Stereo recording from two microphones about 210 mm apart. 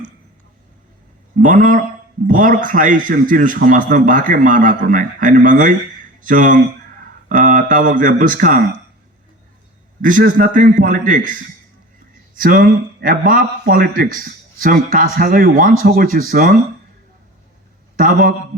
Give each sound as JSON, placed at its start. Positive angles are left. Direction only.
{"t": 1.4, "sound": "a man's voice", "side_deg": -40}
{"t": 10.0, "sound": "a man's voice", "side_deg": -40}
{"t": 17.9, "sound": "a man's voice", "side_deg": -40}